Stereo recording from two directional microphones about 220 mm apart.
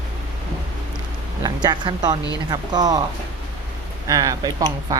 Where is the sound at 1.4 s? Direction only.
20° right (ahead or behind).